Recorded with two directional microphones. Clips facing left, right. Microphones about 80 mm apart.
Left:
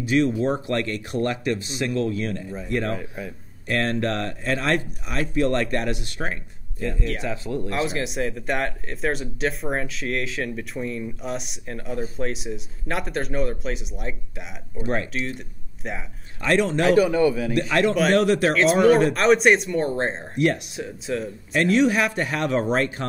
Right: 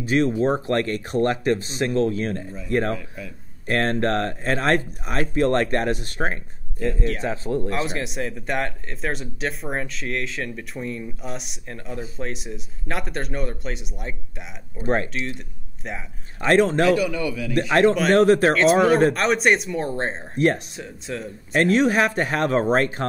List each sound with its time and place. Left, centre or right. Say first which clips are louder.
0.0 s speech: right 1 dB; right
7.7 s speech: left 1 dB; centre
14.8 s speech: right 3 dB; right
16.3 s speech: right 3 dB; right
16.8 s a man's voice: left 3 dB; left
17.6 s speech: right 5 dB; right
18.5 s speech: even; centre
20.3 s speech: right 2 dB; right
20.7 s speech: left 4 dB; centre
21.5 s speech: right 1 dB; right